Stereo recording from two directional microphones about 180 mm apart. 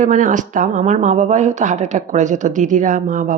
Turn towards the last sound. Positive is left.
turn(degrees=-45)  # may be behind; listen again after turning